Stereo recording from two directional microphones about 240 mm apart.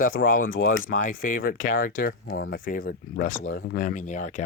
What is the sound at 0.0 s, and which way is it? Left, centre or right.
Speech, left.